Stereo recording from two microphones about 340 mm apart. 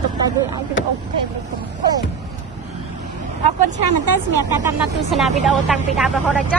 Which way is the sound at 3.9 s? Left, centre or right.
Right.